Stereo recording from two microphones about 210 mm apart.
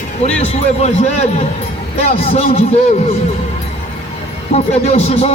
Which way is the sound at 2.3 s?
30° left (ahead or behind).